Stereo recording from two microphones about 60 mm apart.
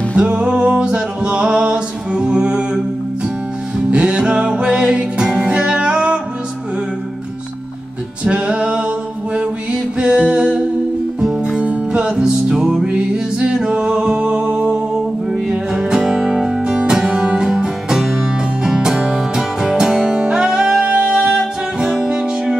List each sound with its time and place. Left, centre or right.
0.1 s music: centre
3.9 s music: centre
8.2 s music: centre